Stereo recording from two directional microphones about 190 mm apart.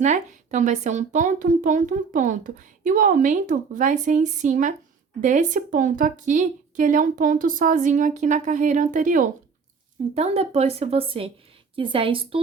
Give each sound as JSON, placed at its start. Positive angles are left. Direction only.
{"t": 0.0, "sound": "a woman's voice", "side_deg": -40}